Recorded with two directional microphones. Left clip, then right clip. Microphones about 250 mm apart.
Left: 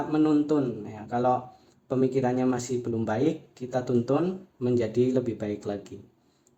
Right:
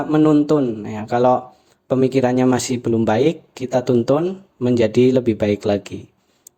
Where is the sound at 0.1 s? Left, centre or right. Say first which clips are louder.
Right 10 dB; right.